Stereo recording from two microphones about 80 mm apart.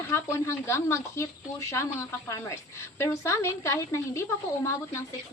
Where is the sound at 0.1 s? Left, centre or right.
Left.